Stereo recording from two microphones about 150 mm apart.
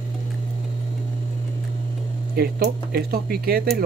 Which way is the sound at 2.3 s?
90° right.